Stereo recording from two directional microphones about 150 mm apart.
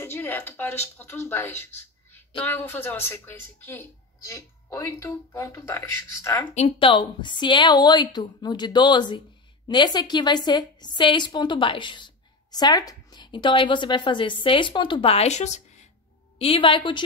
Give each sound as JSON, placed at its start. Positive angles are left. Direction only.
{"t": 0.0, "sound": "a woman's voice", "side_deg": 15}
{"t": 6.5, "sound": "speech", "side_deg": 45}
{"t": 6.9, "sound": "a woman's voice", "side_deg": 30}
{"t": 16.3, "sound": "a woman's voice", "side_deg": 35}